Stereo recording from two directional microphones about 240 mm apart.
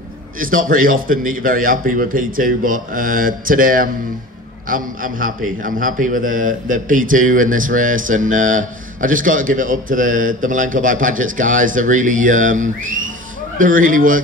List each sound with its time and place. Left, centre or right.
0.4 s a man's voice: right